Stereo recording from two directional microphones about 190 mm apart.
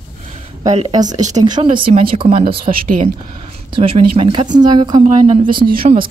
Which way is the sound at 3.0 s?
30° right (ahead or behind).